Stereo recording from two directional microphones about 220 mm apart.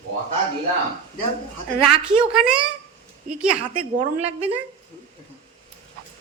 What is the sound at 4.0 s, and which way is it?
Speech, 25° right (ahead or behind).